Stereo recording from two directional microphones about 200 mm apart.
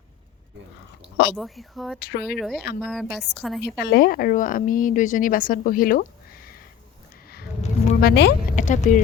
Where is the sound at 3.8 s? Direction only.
50° left (ahead or behind).